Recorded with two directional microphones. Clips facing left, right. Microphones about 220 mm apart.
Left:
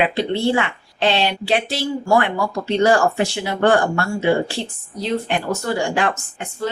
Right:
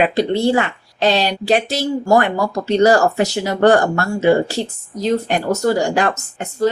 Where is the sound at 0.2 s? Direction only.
40° right (ahead or behind).